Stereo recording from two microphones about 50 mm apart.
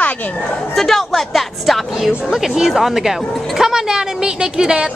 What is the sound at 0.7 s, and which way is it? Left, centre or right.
A woman's voice, centre.